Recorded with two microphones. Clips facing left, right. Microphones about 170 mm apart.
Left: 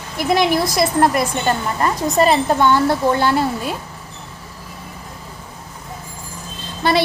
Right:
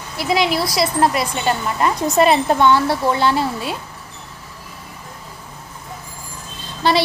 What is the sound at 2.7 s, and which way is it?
A woman's voice, 50° left (ahead or behind).